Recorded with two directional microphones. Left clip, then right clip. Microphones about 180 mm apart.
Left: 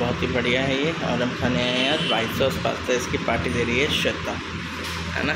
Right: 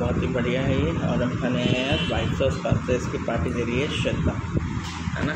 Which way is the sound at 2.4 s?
5° left (ahead or behind).